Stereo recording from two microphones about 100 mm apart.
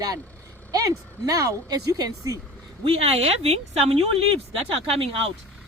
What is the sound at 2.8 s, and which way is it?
Speech, 75° right (ahead or behind).